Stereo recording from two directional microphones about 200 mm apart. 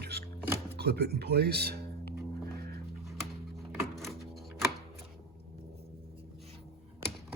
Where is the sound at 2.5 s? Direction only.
50° right (ahead or behind).